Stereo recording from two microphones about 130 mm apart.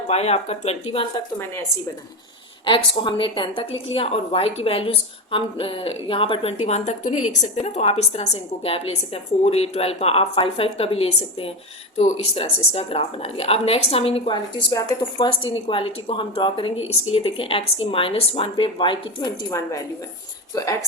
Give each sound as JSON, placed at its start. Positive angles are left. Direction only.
{"t": 0.1, "sound": "speech", "side_deg": 55}
{"t": 2.6, "sound": "a woman's voice", "side_deg": 40}
{"t": 19.5, "sound": "a woman's voice", "side_deg": 20}